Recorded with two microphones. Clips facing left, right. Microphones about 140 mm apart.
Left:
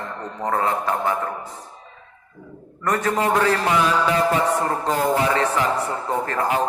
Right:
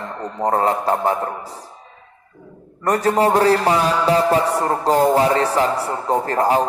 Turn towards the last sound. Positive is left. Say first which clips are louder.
# right 5 dB
turn(degrees=-35)  # may be behind; listen again after turning